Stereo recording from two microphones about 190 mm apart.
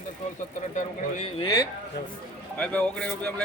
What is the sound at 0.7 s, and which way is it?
Speech, 35° left (ahead or behind).